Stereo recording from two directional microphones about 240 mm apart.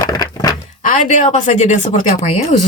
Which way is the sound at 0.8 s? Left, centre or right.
Left.